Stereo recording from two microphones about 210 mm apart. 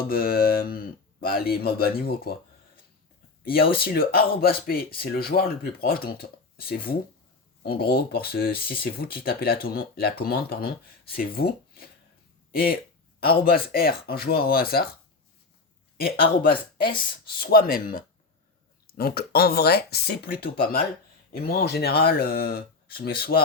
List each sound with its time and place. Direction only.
0.1 s speech: 45° left (ahead or behind)
3.4 s speech: 45° left (ahead or behind)
16.0 s speech: 45° left (ahead or behind)